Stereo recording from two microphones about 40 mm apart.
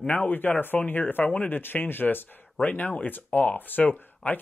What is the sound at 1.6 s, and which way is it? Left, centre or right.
Speech, left.